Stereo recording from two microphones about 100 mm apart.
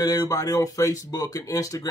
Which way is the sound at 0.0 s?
40° left (ahead or behind).